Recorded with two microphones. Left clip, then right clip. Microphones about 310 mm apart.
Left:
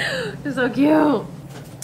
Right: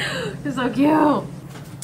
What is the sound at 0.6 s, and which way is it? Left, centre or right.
Speech, right.